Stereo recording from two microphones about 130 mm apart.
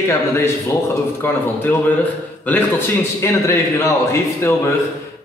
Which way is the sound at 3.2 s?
20° left (ahead or behind).